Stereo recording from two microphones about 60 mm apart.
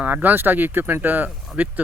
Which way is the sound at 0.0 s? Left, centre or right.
Right.